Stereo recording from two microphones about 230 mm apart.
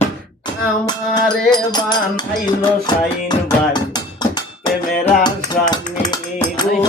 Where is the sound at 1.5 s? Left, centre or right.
Centre.